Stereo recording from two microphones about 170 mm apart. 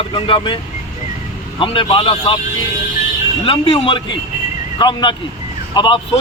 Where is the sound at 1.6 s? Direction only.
30° left (ahead or behind).